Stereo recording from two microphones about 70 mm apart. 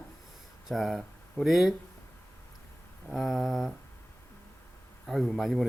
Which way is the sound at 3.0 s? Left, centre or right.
Centre.